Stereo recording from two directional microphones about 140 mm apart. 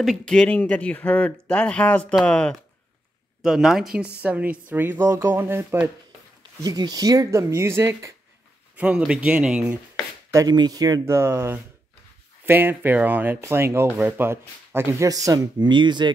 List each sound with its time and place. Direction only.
0.0 s speech: 5° left (ahead or behind)
3.4 s speech: 5° right (ahead or behind); by 8.1 s 20° right (ahead or behind)
8.7 s speech: 10° right (ahead or behind)
10.3 s speech: 30° right (ahead or behind)